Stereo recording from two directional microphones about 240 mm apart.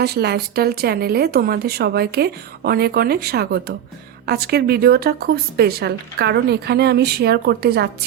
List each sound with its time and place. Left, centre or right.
0.0 s speech: right